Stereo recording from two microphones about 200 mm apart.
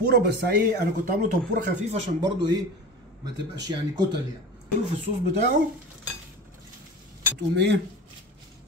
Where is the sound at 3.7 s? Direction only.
20° right (ahead or behind).